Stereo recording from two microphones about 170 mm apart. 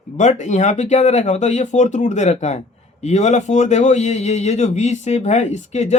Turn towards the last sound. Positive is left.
turn(degrees=45)  # may be behind; listen again after turning